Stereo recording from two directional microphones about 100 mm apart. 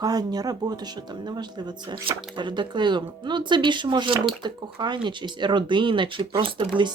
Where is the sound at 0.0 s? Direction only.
40° right (ahead or behind).